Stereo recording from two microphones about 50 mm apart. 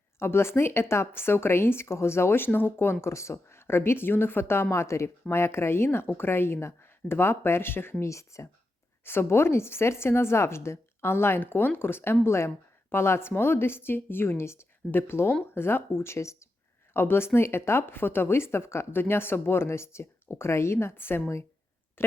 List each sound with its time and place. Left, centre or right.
0.2 s speech: left
8.0 s speech: left
9.0 s a woman's voice: left
12.2 s a woman's voice: left
16.9 s speech: left